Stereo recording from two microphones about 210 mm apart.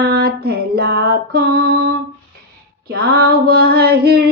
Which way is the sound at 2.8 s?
45° right (ahead or behind).